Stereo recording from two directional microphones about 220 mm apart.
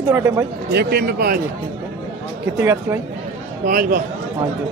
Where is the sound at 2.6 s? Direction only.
10° right (ahead or behind).